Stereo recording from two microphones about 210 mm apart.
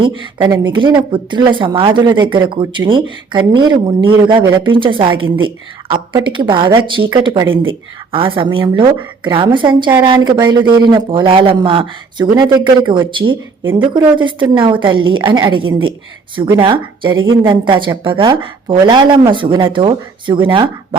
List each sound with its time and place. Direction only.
0.0 s a woman's voice: 20° right (ahead or behind)